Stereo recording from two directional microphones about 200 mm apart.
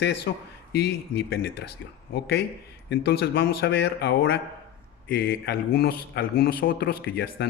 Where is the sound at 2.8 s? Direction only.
55° left (ahead or behind).